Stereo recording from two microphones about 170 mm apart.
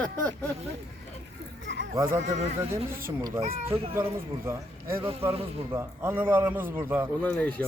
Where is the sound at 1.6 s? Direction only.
90° right.